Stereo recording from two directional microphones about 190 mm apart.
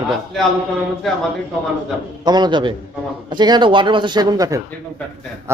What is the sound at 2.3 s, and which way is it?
A man's voice, 20° right (ahead or behind).